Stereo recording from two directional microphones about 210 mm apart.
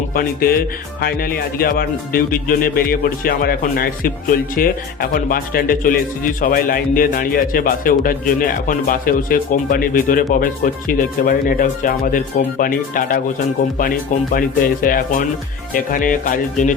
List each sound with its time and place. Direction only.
0.1 s a man's voice: 45° left (ahead or behind)
14.3 s a man's voice: 40° left (ahead or behind)